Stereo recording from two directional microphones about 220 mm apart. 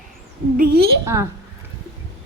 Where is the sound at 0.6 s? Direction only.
45° right (ahead or behind).